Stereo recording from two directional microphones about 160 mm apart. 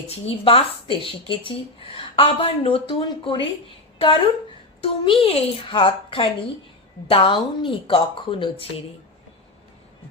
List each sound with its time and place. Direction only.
0.3 s a woman's voice: 35° left (ahead or behind)